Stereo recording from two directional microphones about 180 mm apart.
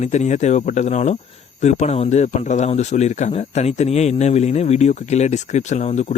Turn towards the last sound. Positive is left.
turn(degrees=40)  # may be behind; listen again after turning